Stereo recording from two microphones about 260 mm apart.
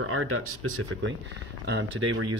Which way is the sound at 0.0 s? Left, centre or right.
Right.